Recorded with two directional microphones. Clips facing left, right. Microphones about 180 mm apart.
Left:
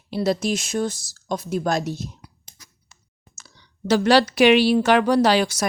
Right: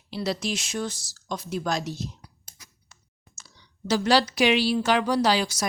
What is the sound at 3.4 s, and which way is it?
Speech, 60° left (ahead or behind).